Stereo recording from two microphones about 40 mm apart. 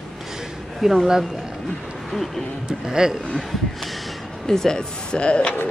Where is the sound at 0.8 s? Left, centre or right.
Centre.